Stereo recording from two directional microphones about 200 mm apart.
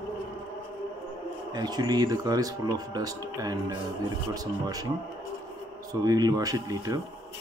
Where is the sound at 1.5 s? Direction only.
20° right (ahead or behind).